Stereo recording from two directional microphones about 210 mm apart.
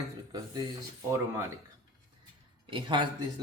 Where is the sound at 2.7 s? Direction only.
20° right (ahead or behind).